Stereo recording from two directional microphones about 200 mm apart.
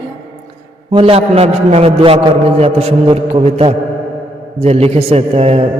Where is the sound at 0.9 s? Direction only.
30° right (ahead or behind).